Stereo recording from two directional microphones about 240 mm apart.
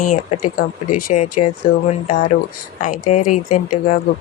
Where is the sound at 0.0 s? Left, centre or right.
Left.